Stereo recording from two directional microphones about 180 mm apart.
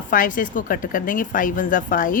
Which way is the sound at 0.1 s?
50° left (ahead or behind).